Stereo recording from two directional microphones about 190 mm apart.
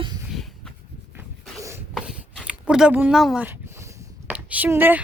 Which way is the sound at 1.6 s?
15° right (ahead or behind).